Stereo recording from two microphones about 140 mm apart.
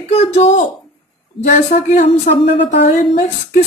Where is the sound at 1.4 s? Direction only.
60° left (ahead or behind).